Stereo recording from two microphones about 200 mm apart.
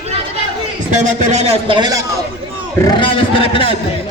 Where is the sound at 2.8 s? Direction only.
20° left (ahead or behind).